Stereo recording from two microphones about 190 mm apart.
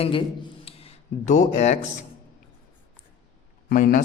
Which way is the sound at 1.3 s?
40° left (ahead or behind).